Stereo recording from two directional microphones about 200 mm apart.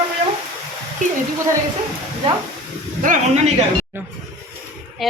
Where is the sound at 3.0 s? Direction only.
40° right (ahead or behind).